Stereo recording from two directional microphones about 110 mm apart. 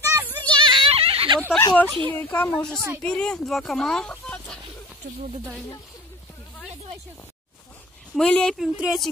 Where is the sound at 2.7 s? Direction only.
20° right (ahead or behind).